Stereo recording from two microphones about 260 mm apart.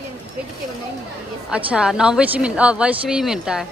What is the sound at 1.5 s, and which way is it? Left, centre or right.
A woman's voice, centre.